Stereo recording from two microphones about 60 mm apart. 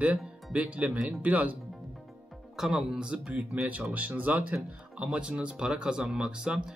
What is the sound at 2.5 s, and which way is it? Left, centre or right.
Speech, centre.